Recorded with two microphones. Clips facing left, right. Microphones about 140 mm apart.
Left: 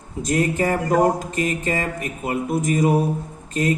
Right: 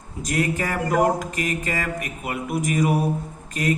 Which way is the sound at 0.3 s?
25° left (ahead or behind).